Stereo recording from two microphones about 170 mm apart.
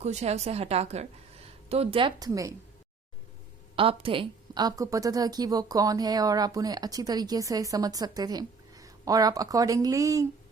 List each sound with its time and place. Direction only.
0.0 s a woman's voice: 40° right (ahead or behind); by 2.6 s 20° right (ahead or behind)
3.8 s a woman's voice: 30° right (ahead or behind)